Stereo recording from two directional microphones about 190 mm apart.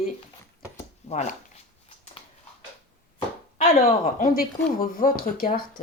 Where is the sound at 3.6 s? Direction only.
45° left (ahead or behind).